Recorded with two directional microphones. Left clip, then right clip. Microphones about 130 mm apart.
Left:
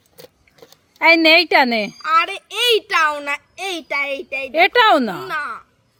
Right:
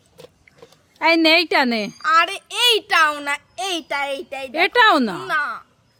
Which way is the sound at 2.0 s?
40° right (ahead or behind).